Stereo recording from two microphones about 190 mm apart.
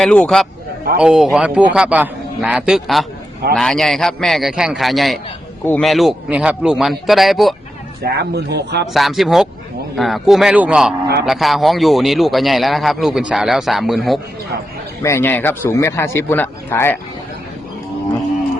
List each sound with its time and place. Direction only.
0.0 s speech: 5° left (ahead or behind)
8.0 s speech: 60° right (ahead or behind)
8.9 s speech: centre (ahead or behind)
15.0 s speech: 10° left (ahead or behind)